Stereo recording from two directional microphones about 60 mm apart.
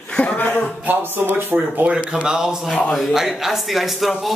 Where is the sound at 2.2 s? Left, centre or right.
Centre.